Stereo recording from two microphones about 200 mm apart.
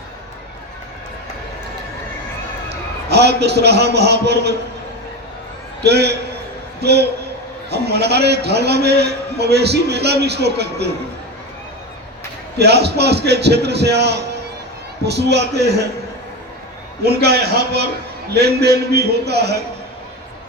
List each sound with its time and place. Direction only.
2.6 s a man's voice: 55° right (ahead or behind)
5.8 s a man's voice: 55° right (ahead or behind)
12.5 s a man's voice: 55° right (ahead or behind)
17.0 s a man's voice: 55° right (ahead or behind)